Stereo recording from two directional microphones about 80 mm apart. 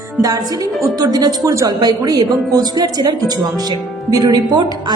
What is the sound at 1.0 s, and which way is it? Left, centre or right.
Speech, right.